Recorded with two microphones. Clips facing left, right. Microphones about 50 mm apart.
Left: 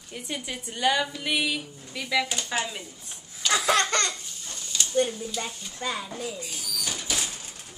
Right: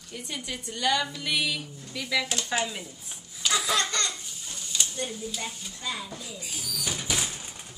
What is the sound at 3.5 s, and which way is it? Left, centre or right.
Laughter, left.